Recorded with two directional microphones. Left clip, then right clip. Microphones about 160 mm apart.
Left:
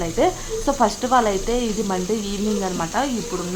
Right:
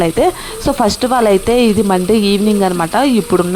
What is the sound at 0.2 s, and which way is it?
Speech, 50° right (ahead or behind).